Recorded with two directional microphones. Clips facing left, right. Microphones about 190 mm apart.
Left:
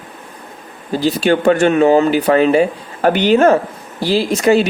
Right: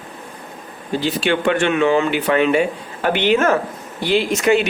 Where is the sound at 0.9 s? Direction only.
40° left (ahead or behind).